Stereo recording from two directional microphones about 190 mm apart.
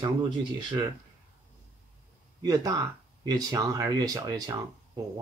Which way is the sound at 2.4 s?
20° right (ahead or behind).